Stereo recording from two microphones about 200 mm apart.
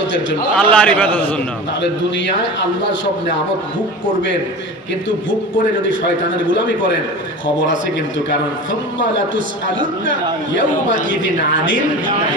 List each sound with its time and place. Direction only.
0.6 s a man's voice: 5° left (ahead or behind)
11.1 s speech: 45° right (ahead or behind)